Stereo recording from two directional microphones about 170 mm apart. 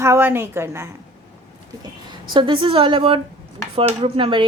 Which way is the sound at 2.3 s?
30° right (ahead or behind).